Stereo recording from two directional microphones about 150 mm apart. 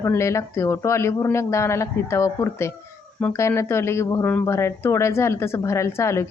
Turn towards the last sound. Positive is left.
turn(degrees=20)  # may be behind; listen again after turning